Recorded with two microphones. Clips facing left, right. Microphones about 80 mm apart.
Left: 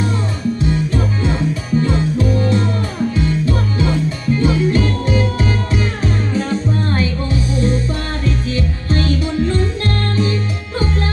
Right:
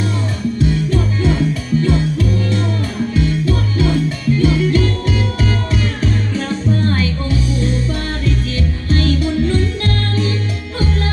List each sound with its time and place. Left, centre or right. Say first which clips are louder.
0.6 s music: right 3 dB; left